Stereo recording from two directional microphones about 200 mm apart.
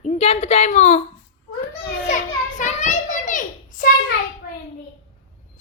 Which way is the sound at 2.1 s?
40° left (ahead or behind).